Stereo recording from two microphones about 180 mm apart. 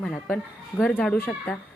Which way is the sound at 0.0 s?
5° left (ahead or behind).